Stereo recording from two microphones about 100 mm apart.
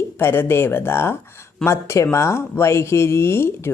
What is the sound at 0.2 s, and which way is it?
Speech, 25° left (ahead or behind).